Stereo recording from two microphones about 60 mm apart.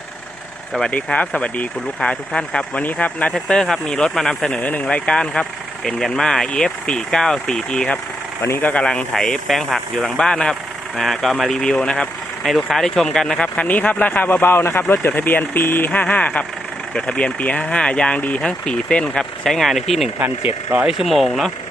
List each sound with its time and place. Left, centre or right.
0.9 s speech: left
2.8 s speech: left
3.5 s speech: centre
4.6 s speech: left
8.4 s speech: left
8.6 s speech: centre
9.9 s speech: centre
11.6 s speech: centre
12.5 s speech: centre
19.5 s speech: centre
20.1 s speech: right
20.8 s speech: centre